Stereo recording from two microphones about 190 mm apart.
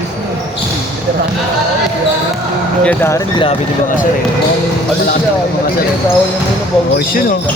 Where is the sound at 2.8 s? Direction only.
10° left (ahead or behind).